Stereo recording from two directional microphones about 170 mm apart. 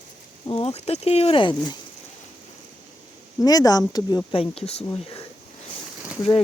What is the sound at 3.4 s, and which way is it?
Speech, 20° left (ahead or behind).